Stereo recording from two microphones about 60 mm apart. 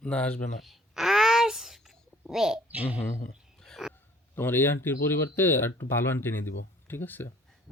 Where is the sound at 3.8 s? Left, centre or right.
Centre.